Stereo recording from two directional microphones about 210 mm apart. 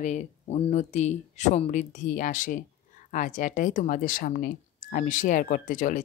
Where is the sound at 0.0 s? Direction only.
35° left (ahead or behind).